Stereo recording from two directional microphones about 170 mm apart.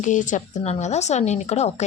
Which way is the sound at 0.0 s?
45° left (ahead or behind).